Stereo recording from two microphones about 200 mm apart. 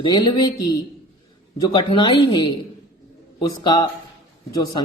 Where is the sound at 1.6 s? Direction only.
20° left (ahead or behind).